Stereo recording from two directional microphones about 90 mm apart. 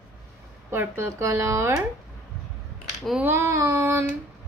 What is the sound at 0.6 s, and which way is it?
Speech, 30° right (ahead or behind).